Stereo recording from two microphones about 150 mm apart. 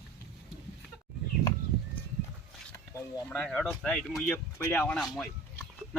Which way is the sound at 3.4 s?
Centre (ahead or behind).